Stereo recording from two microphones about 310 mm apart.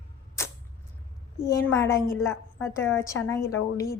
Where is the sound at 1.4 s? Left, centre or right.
Centre.